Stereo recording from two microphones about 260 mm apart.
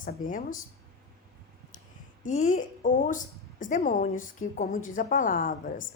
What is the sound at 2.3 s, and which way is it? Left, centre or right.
A woman's voice, left.